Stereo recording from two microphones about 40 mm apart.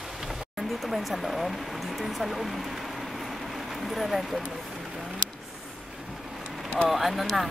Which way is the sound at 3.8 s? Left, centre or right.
Centre.